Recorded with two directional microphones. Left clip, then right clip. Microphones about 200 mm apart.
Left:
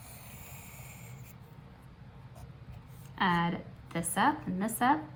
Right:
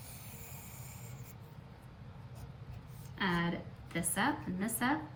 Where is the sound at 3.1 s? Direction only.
20° left (ahead or behind).